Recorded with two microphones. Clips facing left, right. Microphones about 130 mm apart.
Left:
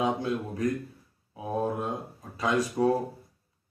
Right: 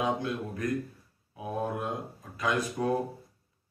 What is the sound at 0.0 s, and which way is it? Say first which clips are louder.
Speech: left 2 dB; 25° left (ahead or behind).